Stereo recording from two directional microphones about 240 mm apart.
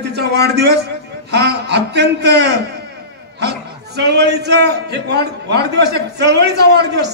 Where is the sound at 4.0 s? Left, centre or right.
Right.